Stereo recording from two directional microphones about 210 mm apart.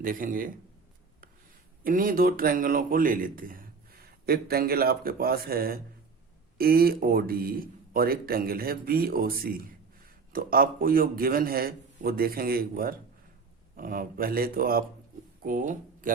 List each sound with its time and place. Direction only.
0.0 s a man's voice: 40° right (ahead or behind)
1.8 s a man's voice: 40° right (ahead or behind)